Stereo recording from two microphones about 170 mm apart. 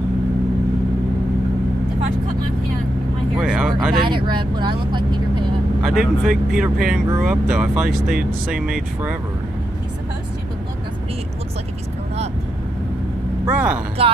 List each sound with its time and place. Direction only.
3.3 s speech: 5° right (ahead or behind)
4.0 s speech: 25° right (ahead or behind)
5.8 s speech: centre (ahead or behind)
13.5 s speech: 10° right (ahead or behind)
14.0 s speech: 35° right (ahead or behind)